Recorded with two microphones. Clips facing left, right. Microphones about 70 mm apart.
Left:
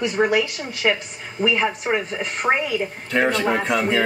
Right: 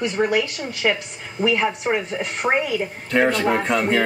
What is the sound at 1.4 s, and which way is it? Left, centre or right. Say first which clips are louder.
Speech: right 1 dB; centre.